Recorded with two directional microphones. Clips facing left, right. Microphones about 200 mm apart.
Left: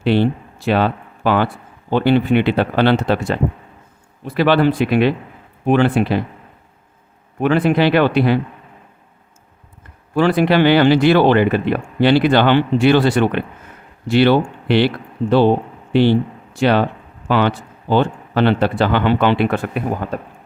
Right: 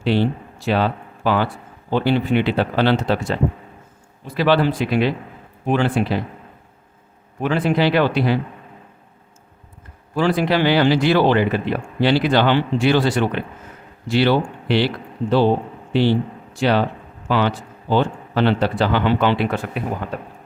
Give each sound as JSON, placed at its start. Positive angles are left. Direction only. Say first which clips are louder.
{"t": 0.0, "sound": "speech", "louder": "left 3 dB", "side_deg": 60}
{"t": 7.4, "sound": "speech", "louder": "left 4 dB", "side_deg": 60}
{"t": 10.2, "sound": "speech", "louder": "left 4 dB", "side_deg": 60}